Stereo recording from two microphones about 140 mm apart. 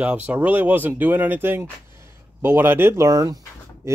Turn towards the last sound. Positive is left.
turn(degrees=-25)  # may be behind; listen again after turning